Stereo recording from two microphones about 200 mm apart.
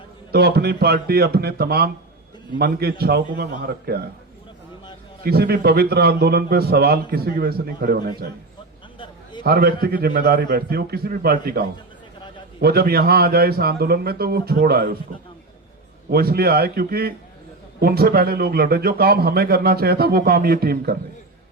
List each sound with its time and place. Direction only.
0.3 s a man's voice: 50° right (ahead or behind)
5.2 s a man's voice: 50° right (ahead or behind)
9.4 s a man's voice: 50° right (ahead or behind)
16.0 s a man's voice: 50° right (ahead or behind)